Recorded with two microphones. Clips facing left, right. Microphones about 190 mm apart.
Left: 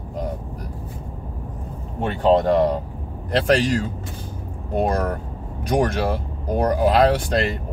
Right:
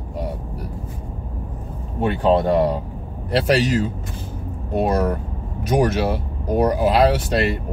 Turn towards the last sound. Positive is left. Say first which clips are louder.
# even
turn(degrees=-5)  # may be behind; listen again after turning